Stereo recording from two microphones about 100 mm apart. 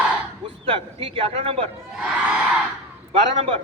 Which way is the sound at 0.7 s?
65° right (ahead or behind).